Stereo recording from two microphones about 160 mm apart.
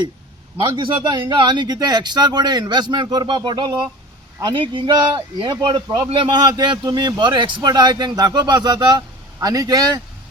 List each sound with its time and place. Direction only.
0.5 s speech: 30° right (ahead or behind)